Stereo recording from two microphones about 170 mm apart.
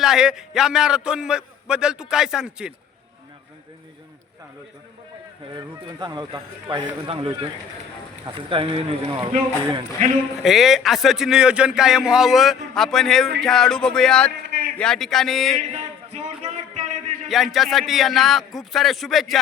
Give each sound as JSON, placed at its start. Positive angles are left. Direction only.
{"t": 0.0, "sound": "a man's voice", "side_deg": -5}
{"t": 5.5, "sound": "a man's voice", "side_deg": -25}
{"t": 8.4, "sound": "speech", "side_deg": -30}
{"t": 10.0, "sound": "a man's voice", "side_deg": -50}
{"t": 10.4, "sound": "a man's voice", "side_deg": 0}
{"t": 16.1, "sound": "a sound", "side_deg": -40}
{"t": 17.2, "sound": "a man's voice", "side_deg": 0}